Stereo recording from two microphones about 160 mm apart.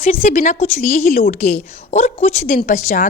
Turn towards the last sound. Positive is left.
turn(degrees=50)  # may be behind; listen again after turning